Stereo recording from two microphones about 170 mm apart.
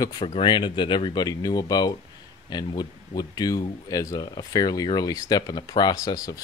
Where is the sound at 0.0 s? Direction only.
30° left (ahead or behind).